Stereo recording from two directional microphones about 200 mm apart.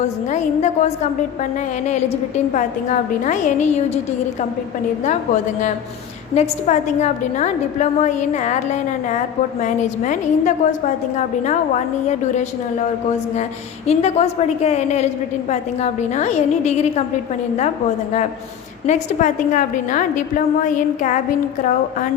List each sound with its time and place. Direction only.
0.0 s a woman's voice: 35° left (ahead or behind)
2.5 s a woman's voice: 40° left (ahead or behind)
5.0 s a woman's voice: 40° left (ahead or behind)
13.8 s a woman's voice: 30° left (ahead or behind)
18.9 s a woman's voice: 40° left (ahead or behind)